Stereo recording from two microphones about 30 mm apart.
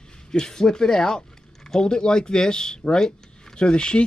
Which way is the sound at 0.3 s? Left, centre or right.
Left.